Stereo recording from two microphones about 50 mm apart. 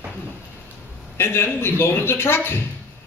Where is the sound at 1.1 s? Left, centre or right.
Left.